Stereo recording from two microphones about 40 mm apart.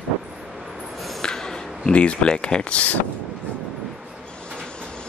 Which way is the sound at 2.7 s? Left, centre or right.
Left.